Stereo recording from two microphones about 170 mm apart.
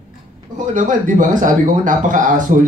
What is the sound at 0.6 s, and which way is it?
A man's voice, 50° right (ahead or behind).